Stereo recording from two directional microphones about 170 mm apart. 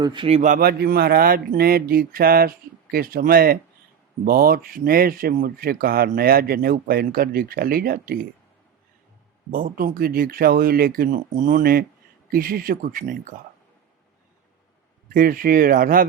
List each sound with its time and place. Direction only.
0.0 s speech: 30° right (ahead or behind)
0.5 s speech: 65° right (ahead or behind)
9.5 s speech: 55° right (ahead or behind)
15.1 s speech: 55° right (ahead or behind)